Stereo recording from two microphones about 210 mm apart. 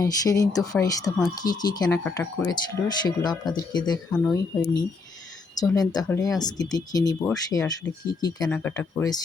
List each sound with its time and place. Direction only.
0.0 s speech: 15° left (ahead or behind)
4.1 s speech: centre (ahead or behind)
4.5 s speech: 20° left (ahead or behind)
7.3 s speech: 5° left (ahead or behind)